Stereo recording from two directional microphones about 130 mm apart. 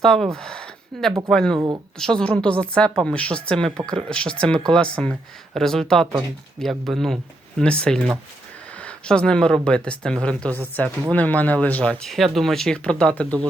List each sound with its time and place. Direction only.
0.0 s speech: 5° left (ahead or behind)
1.5 s speech: 30° right (ahead or behind)
2.0 s a woman's voice: 5° left (ahead or behind)